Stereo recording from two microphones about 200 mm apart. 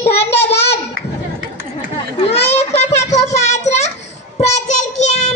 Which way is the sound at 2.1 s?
30° left (ahead or behind).